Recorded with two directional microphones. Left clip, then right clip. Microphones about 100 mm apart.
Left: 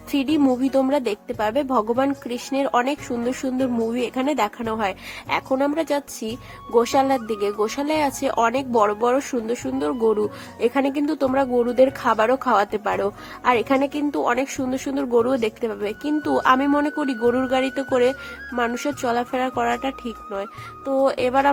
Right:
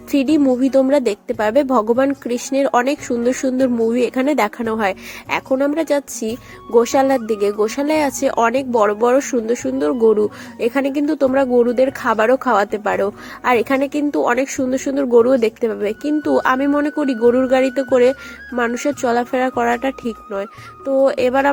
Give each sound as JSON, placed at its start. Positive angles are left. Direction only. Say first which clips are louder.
{"t": 0.1, "sound": "a woman's voice", "louder": "right 5 dB", "side_deg": -35}